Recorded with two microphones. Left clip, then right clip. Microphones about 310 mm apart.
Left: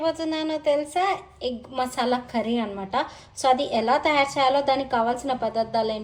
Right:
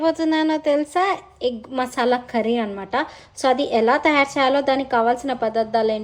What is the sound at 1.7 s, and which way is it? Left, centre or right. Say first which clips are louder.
Speech: even; centre.